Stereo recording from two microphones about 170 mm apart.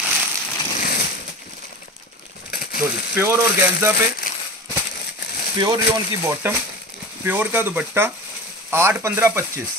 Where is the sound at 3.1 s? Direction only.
15° right (ahead or behind).